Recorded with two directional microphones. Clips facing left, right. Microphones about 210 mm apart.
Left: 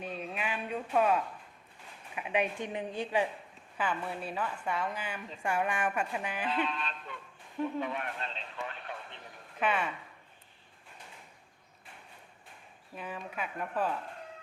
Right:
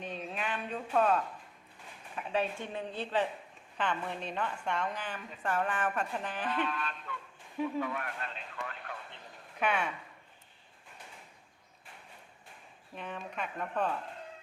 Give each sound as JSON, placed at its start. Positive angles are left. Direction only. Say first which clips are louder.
{"t": 0.0, "sound": "a sound", "louder": "left 1 dB", "side_deg": 5}
{"t": 2.1, "sound": "a woman's voice", "louder": "left 1 dB", "side_deg": 15}
{"t": 6.7, "sound": "music", "louder": "even", "side_deg": 20}
{"t": 7.8, "sound": "a man's voice", "louder": "even", "side_deg": 20}
{"t": 8.6, "sound": "radio", "louder": "left 2 dB", "side_deg": 20}
{"t": 9.6, "sound": "speech", "louder": "left 1 dB", "side_deg": 0}
{"t": 13.0, "sound": "speech", "louder": "even", "side_deg": 5}